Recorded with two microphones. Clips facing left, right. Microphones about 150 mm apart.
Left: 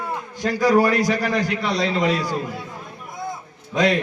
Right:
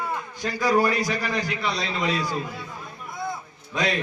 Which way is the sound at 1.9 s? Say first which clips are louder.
Left 5 dB; 40° left (ahead or behind).